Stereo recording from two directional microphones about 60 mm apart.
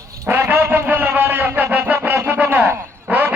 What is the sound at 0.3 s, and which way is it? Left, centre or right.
Music, right.